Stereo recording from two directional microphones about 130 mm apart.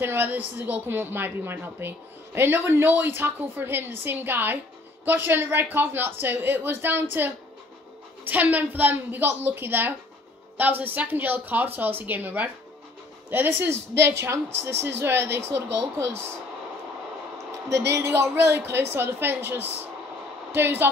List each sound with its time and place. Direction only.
0.0 s a woman's voice: 15° right (ahead or behind)
17.6 s a woman's voice: 20° right (ahead or behind)